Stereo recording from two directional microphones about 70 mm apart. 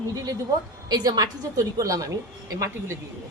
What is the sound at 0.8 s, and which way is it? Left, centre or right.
A woman's voice, right.